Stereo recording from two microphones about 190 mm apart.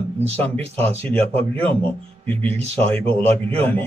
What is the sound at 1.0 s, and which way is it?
A man's voice, 10° left (ahead or behind).